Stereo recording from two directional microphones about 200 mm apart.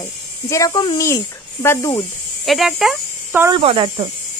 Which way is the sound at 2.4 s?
Centre (ahead or behind).